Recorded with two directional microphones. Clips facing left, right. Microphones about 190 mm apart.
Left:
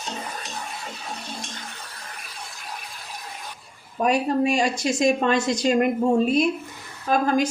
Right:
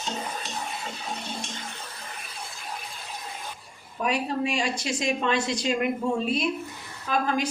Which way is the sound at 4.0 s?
45° left (ahead or behind).